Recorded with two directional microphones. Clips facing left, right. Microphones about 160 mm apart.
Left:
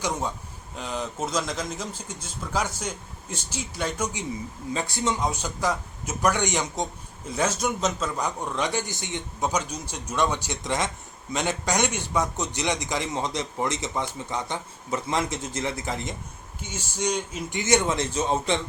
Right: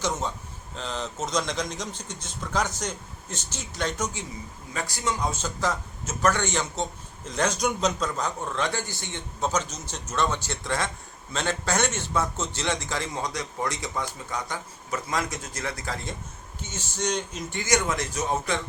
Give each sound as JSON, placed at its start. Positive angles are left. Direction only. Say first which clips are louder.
{"t": 0.0, "sound": "a man's voice", "louder": "even", "side_deg": 10}
{"t": 4.7, "sound": "a man's voice", "louder": "left 3 dB", "side_deg": 25}
{"t": 5.3, "sound": "a man's voice", "louder": "left 1 dB", "side_deg": 15}
{"t": 17.6, "sound": "a man's voice", "louder": "left 3 dB", "side_deg": 25}